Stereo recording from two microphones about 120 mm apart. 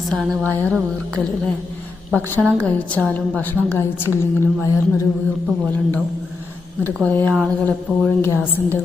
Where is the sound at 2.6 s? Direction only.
10° left (ahead or behind); by 5.0 s 25° left (ahead or behind).